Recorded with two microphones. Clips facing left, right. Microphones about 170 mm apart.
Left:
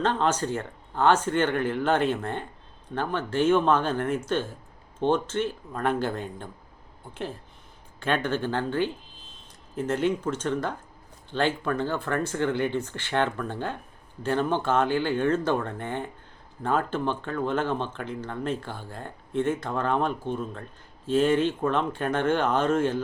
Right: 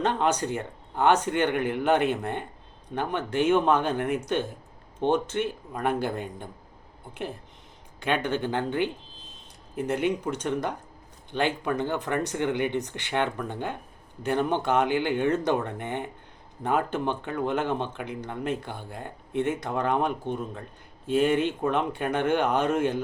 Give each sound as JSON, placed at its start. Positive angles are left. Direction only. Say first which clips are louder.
{"t": 0.0, "sound": "speech", "louder": "even", "side_deg": -15}